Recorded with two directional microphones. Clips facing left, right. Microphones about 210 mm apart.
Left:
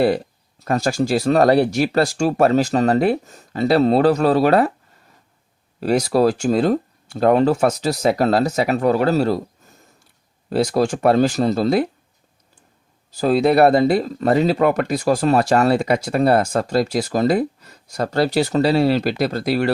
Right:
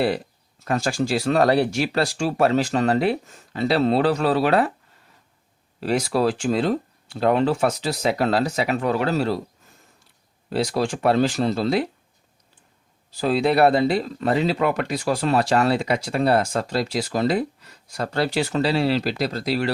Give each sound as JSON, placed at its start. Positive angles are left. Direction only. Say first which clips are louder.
{"t": 0.6, "sound": "speech", "louder": "left 4 dB", "side_deg": 40}
{"t": 5.8, "sound": "speech", "louder": "left 5 dB", "side_deg": 40}
{"t": 13.1, "sound": "speech", "louder": "left 4 dB", "side_deg": 45}